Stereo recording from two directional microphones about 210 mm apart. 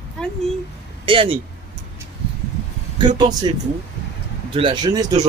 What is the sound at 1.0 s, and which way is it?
Speech, 25° right (ahead or behind).